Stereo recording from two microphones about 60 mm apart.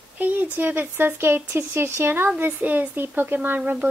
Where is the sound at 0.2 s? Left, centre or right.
Right.